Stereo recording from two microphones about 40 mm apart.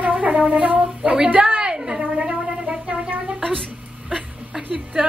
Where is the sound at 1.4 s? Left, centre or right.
Right.